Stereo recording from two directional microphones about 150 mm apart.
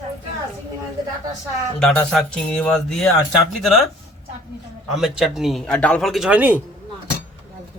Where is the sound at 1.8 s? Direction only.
5° left (ahead or behind).